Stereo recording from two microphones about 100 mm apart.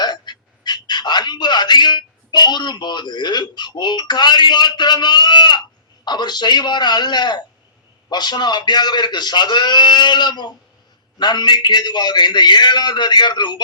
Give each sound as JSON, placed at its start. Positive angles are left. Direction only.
{"t": 0.0, "sound": "a man's voice", "side_deg": 45}